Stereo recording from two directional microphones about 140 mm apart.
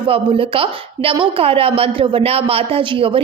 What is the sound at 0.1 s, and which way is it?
A woman's voice, 40° right (ahead or behind).